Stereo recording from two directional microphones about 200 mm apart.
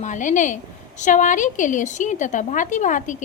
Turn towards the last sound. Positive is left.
turn(degrees=40)  # may be behind; listen again after turning